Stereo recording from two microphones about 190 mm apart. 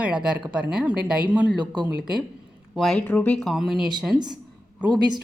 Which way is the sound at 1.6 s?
20° right (ahead or behind).